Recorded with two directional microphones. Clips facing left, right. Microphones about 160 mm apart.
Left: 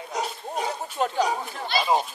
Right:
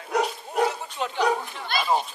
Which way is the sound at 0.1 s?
60° right (ahead or behind).